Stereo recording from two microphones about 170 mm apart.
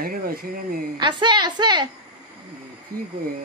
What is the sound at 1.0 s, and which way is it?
Speech, 25° right (ahead or behind).